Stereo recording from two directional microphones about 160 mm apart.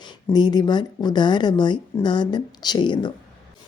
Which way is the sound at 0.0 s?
25° left (ahead or behind).